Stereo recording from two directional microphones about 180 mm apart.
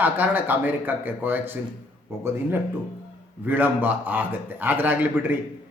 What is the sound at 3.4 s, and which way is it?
A man's voice, 10° right (ahead or behind).